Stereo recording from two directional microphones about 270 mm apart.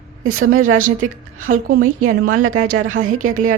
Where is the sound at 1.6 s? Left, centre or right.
Right.